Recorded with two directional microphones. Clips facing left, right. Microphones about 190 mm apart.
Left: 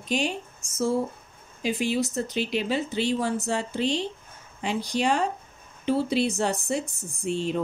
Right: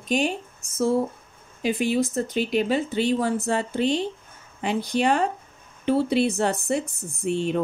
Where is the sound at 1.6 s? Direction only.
55° right (ahead or behind).